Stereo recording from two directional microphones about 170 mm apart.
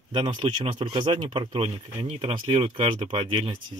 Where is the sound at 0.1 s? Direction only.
30° right (ahead or behind).